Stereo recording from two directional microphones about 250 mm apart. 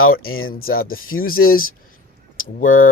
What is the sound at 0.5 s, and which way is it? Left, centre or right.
Speech, left.